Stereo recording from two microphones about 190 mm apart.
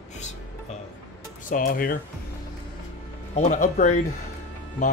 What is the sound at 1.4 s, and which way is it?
Speech, 45° left (ahead or behind).